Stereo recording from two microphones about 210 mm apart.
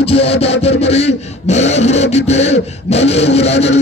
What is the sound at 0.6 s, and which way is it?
Speech, 30° left (ahead or behind).